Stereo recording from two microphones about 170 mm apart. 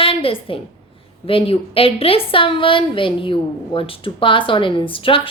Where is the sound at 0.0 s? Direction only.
30° left (ahead or behind).